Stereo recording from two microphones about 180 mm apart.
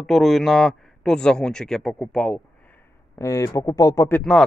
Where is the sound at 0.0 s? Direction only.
Centre (ahead or behind).